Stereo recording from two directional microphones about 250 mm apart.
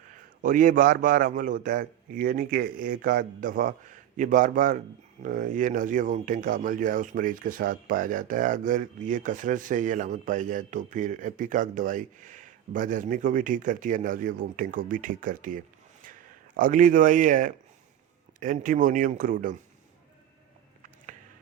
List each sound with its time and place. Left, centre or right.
0.4 s speech: right